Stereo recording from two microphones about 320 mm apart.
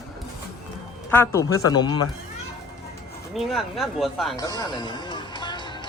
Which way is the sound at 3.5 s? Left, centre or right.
Centre.